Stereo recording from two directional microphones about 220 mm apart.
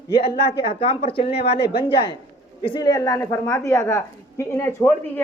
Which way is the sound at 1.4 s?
50° left (ahead or behind).